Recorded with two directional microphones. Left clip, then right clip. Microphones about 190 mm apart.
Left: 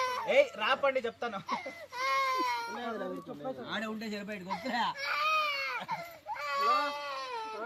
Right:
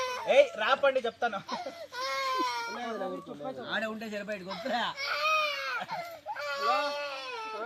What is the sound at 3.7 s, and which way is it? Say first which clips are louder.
Speech: right 7 dB; 35° left (ahead or behind).